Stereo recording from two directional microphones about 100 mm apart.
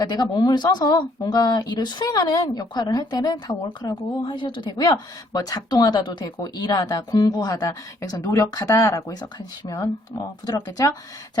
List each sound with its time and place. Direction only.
0.0 s speech: 40° left (ahead or behind)
4.3 s speech: 50° left (ahead or behind)
4.8 s speech: 40° left (ahead or behind)